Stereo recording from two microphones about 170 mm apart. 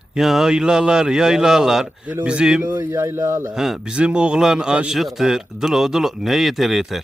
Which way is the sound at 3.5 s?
Centre (ahead or behind).